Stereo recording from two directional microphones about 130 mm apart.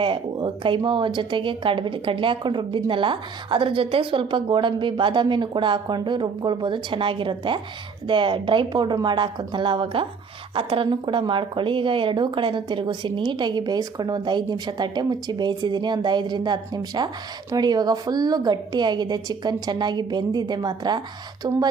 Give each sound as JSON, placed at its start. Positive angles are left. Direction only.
{"t": 0.0, "sound": "speech", "side_deg": -40}